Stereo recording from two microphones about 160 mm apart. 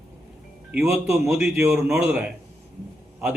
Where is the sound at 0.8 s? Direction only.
15° right (ahead or behind).